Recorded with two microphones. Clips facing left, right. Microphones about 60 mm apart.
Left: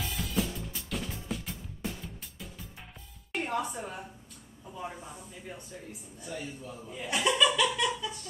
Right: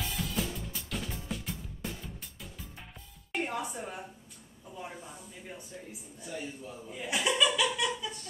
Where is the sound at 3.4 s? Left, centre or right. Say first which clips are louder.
Left 2 dB; centre.